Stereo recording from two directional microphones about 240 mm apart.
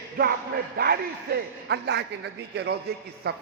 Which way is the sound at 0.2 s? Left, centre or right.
Right.